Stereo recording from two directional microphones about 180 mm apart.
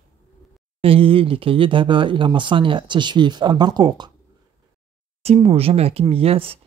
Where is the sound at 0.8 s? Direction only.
30° right (ahead or behind).